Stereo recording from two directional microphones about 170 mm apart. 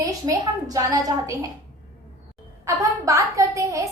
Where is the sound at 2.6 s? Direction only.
20° right (ahead or behind).